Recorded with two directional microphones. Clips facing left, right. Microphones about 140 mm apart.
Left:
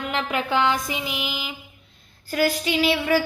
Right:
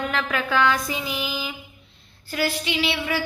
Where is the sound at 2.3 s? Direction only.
40° left (ahead or behind).